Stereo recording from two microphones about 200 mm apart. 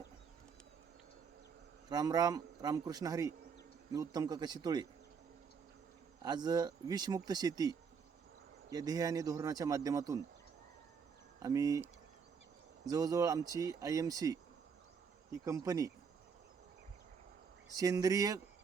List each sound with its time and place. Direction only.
1.9 s speech: 20° right (ahead or behind)
6.2 s speech: 20° right (ahead or behind)
11.4 s speech: 15° right (ahead or behind)
15.4 s speech: 15° right (ahead or behind)
17.7 s speech: 20° right (ahead or behind)